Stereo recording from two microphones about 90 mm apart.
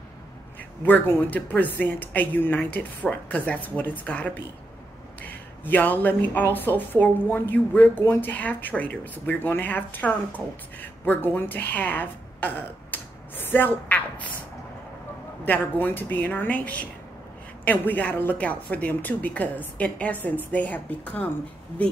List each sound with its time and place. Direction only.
0.8 s speech: 25° left (ahead or behind)
15.4 s a woman's voice: 20° left (ahead or behind)